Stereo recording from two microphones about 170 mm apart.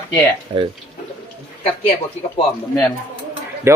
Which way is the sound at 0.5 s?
25° right (ahead or behind).